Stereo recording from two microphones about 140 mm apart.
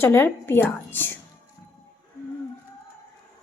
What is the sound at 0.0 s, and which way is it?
Speech, 15° left (ahead or behind).